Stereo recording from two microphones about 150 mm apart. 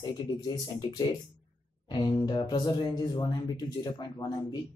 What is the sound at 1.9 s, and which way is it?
Speech, 30° left (ahead or behind).